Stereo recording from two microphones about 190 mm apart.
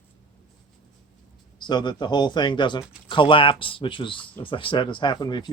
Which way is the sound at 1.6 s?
25° left (ahead or behind).